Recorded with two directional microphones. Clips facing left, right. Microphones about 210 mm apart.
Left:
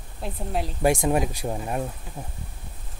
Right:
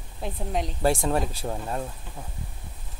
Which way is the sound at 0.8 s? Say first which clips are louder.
Left 3 dB; 15° left (ahead or behind).